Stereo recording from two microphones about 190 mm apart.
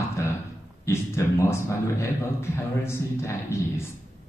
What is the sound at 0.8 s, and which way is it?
Speech, 15° left (ahead or behind).